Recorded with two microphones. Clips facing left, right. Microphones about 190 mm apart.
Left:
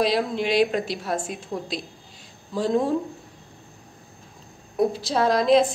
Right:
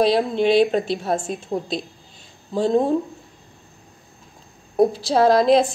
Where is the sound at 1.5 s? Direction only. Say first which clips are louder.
Right 5 dB; 35° right (ahead or behind).